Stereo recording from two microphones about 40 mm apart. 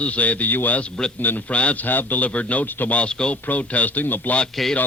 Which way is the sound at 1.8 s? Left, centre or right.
Left.